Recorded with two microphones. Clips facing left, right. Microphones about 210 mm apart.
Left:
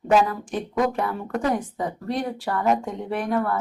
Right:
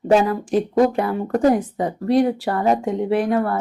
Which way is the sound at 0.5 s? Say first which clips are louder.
Right 7 dB; 35° right (ahead or behind).